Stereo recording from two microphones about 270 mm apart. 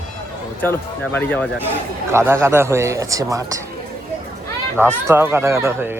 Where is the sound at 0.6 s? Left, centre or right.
Centre.